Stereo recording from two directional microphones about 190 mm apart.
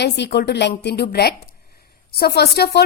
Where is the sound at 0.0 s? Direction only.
60° left (ahead or behind).